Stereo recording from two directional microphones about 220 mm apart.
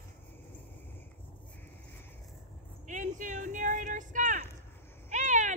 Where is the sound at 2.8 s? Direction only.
35° right (ahead or behind).